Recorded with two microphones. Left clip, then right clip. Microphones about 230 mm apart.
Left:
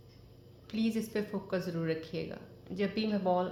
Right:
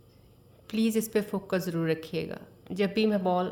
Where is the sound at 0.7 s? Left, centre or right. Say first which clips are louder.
Right 7 dB; right.